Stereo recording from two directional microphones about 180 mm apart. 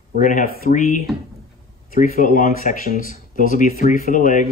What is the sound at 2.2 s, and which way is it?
A man's voice, 45° left (ahead or behind).